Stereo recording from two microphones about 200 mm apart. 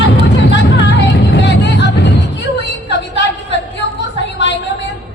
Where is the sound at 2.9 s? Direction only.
60° left (ahead or behind).